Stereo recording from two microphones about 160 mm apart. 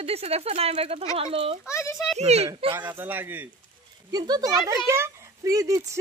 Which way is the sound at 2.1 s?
40° right (ahead or behind).